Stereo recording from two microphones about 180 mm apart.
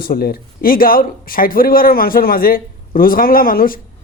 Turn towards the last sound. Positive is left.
turn(degrees=50)  # may be behind; listen again after turning